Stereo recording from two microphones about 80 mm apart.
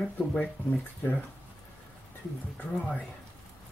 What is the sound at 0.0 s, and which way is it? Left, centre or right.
Speech, centre.